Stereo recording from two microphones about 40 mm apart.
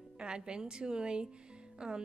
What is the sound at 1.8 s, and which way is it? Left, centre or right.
Music, centre.